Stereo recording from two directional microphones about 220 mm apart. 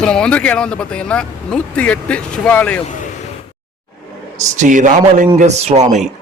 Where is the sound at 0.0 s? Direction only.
5° left (ahead or behind).